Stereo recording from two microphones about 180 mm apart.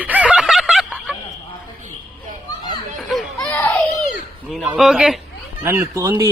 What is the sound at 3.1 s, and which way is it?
Children playing, 5° left (ahead or behind).